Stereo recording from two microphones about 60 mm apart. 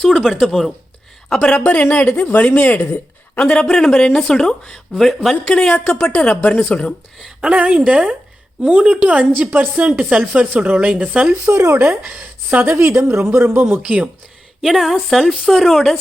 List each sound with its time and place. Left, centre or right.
0.0 s a woman's voice: centre
1.7 s a woman's voice: left
3.4 s a woman's voice: centre
7.2 s a woman's voice: centre
11.5 s speech: right
12.2 s speech: right
12.7 s speech: right
13.8 s speech: centre
14.6 s a woman's voice: centre